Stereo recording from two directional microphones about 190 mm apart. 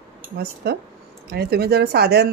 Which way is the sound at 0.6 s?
60° right (ahead or behind).